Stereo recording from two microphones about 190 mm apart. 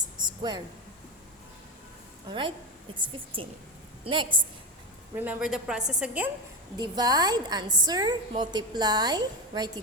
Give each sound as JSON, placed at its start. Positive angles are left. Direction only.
{"t": 0.2, "sound": "a sound", "side_deg": -20}
{"t": 2.2, "sound": "a woman's voice", "side_deg": -25}
{"t": 4.0, "sound": "a woman's voice", "side_deg": -25}
{"t": 5.1, "sound": "a woman's voice", "side_deg": -10}
{"t": 6.7, "sound": "a woman's voice", "side_deg": -20}